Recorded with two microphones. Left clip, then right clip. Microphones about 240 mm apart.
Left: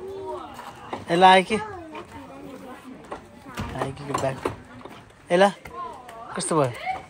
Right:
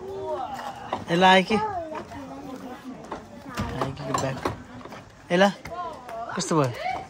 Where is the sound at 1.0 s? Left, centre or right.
Centre.